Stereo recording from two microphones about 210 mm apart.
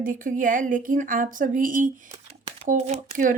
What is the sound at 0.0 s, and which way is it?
A woman's voice, 40° right (ahead or behind).